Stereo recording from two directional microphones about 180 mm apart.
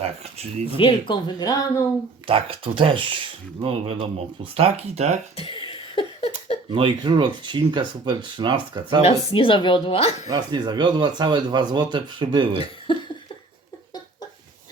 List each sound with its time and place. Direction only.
0.0 s speech: 35° right (ahead or behind)
0.8 s a woman's voice: 25° left (ahead or behind)
2.2 s speech: 30° right (ahead or behind)
5.4 s a sound: 30° left (ahead or behind)
6.7 s speech: 30° right (ahead or behind)
9.0 s a woman's voice: 30° left (ahead or behind)
10.2 s speech: 20° right (ahead or behind)